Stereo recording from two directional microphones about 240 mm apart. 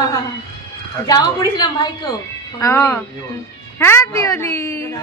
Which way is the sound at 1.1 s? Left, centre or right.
Centre.